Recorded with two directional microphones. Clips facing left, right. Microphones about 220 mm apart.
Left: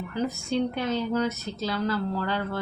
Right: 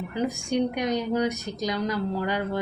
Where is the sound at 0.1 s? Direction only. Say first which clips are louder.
Right 1 dB; 15° right (ahead or behind).